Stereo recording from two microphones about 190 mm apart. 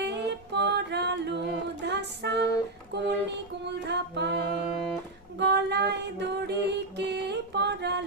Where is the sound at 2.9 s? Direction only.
65° right (ahead or behind).